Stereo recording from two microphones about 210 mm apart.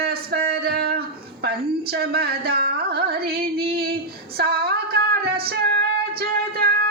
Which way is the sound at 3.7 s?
45° right (ahead or behind).